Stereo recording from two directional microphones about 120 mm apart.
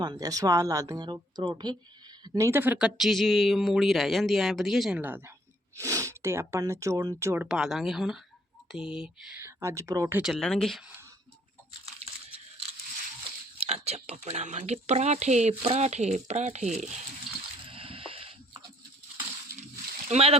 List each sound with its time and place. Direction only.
0.0 s speech: 35° right (ahead or behind)
2.2 s a sound: 35° right (ahead or behind)
2.5 s speech: 15° right (ahead or behind)
2.7 s speech: 5° right (ahead or behind)
5.7 s speech: 25° right (ahead or behind)
7.4 s speech: 5° right (ahead or behind)
9.4 s speech: 25° right (ahead or behind)
10.2 s speech: 5° left (ahead or behind)
11.9 s a sound: 55° right (ahead or behind)
13.6 s speech: 60° right (ahead or behind)
17.7 s a sound: 50° right (ahead or behind)
20.1 s speech: 60° right (ahead or behind)